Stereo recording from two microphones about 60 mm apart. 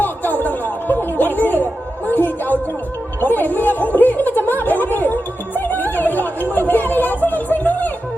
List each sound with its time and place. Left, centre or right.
0.0 s music: left
2.0 s a sound: left
5.5 s chatter: left